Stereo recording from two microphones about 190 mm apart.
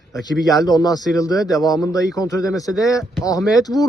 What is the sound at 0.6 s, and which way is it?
A man's voice, 20° left (ahead or behind).